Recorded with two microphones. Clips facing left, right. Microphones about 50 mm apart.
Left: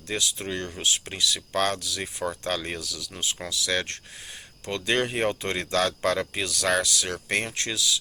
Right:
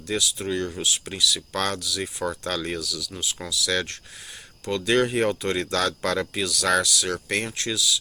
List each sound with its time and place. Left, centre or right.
0.1 s speech: left
7.5 s speech: left